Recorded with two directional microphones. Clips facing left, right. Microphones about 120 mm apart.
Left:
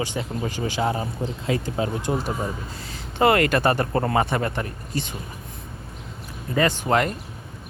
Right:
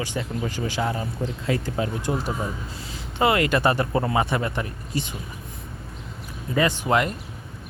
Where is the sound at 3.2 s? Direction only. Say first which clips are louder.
Left 2 dB; 50° left (ahead or behind).